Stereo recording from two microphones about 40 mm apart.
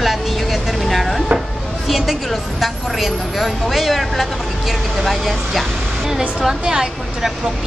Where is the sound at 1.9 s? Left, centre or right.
Centre.